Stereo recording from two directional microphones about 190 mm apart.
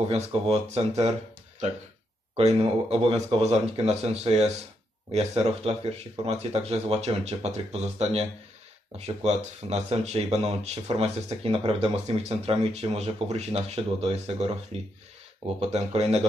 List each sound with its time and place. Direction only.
0.1 s speech: 30° right (ahead or behind)
2.3 s speech: 30° right (ahead or behind)